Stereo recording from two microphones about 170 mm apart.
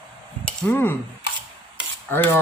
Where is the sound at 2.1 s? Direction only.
15° left (ahead or behind).